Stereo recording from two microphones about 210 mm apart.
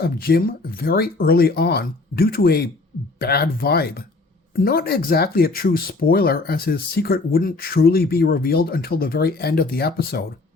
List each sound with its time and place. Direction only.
0.0 s speech: 45° left (ahead or behind)